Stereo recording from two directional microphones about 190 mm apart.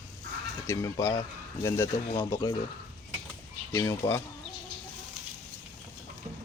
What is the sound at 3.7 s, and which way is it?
Speech, 15° left (ahead or behind).